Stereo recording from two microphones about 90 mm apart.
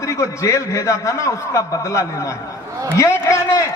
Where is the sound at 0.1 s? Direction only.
35° left (ahead or behind).